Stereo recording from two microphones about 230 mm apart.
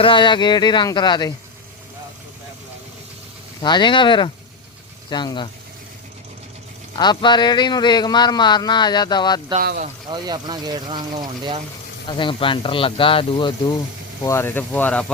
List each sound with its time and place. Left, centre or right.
0.0 s speech: left
3.6 s speech: centre
6.9 s speech: centre
9.6 s speech: right
10.1 s speech: centre
12.0 s speech: left
14.3 s speech: centre